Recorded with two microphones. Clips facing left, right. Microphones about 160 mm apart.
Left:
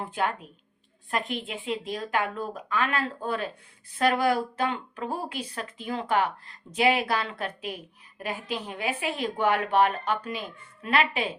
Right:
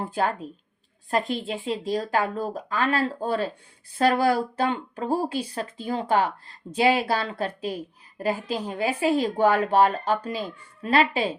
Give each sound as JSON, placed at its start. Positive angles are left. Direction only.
{"t": 0.0, "sound": "a woman's voice", "side_deg": -35}